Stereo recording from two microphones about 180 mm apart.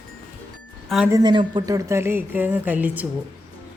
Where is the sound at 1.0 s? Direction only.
20° right (ahead or behind).